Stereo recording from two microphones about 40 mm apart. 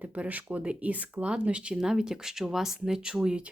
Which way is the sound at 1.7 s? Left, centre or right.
Centre.